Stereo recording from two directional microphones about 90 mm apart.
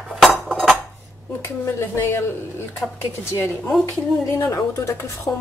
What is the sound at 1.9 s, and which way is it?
Speech, 30° left (ahead or behind).